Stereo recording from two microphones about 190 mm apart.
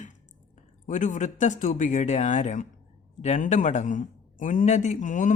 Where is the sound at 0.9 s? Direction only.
40° left (ahead or behind).